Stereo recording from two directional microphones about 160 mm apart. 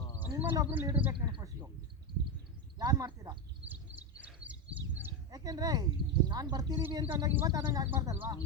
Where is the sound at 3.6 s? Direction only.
10° right (ahead or behind).